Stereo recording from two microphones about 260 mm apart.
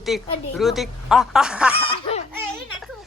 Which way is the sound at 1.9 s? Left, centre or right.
Left.